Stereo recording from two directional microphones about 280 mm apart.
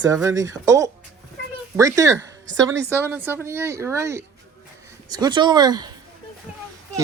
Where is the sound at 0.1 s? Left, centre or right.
Centre.